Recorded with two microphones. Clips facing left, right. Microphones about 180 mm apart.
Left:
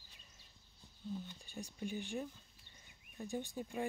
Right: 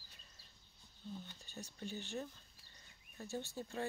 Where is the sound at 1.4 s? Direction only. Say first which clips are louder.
Left 3 dB; 10° left (ahead or behind).